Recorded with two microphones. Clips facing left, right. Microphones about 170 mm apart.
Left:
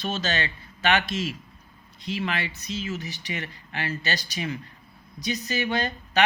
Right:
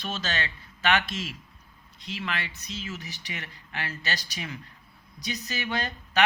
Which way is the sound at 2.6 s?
5° left (ahead or behind).